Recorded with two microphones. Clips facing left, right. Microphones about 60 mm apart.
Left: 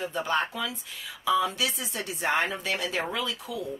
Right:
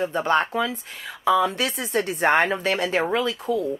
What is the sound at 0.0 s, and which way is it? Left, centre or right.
A woman's voice, right.